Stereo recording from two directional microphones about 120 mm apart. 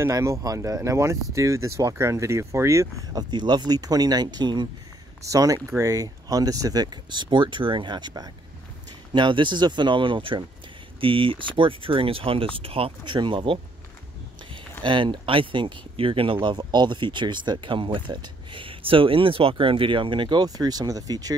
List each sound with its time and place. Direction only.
0.0 s speech: 25° right (ahead or behind)